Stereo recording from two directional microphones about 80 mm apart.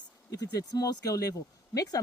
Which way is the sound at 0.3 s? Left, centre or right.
Left.